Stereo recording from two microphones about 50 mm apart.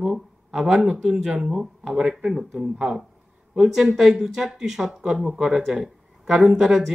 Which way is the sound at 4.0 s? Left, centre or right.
Centre.